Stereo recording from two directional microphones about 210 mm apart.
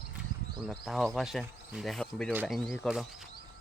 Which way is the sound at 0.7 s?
Centre (ahead or behind).